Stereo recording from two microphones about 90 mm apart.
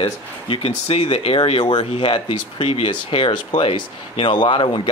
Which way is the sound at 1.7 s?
65° left (ahead or behind).